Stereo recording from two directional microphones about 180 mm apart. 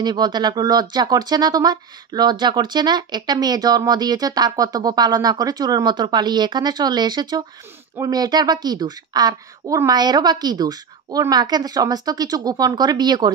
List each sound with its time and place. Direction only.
0.0 s speech: 25° right (ahead or behind)